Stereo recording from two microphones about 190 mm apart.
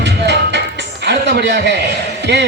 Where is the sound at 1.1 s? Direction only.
65° right (ahead or behind).